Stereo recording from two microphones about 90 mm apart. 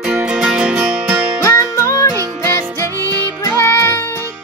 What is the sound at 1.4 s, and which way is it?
Music, 35° left (ahead or behind).